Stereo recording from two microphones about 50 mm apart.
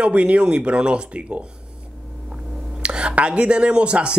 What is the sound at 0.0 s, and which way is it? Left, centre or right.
Speech, right.